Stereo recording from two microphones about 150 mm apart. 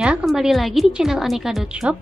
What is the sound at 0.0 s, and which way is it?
A woman's voice, 5° right (ahead or behind).